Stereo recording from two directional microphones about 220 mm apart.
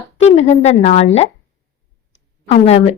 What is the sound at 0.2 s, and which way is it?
A woman's voice, 30° left (ahead or behind).